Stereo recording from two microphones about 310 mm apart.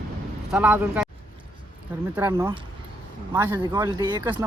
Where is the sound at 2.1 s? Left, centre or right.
Centre.